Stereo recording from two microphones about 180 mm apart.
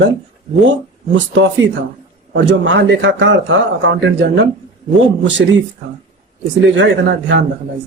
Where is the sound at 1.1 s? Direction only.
90° right.